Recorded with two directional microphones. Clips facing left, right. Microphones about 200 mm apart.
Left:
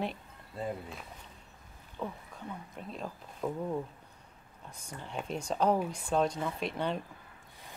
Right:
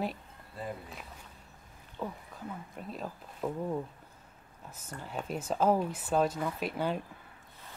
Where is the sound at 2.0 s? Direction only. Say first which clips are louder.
Even; 5° right (ahead or behind).